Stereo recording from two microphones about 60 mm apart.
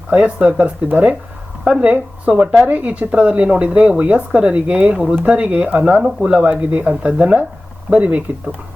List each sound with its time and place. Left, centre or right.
0.1 s a woman's voice: right
6.0 s speech: centre
6.2 s a woman's voice: right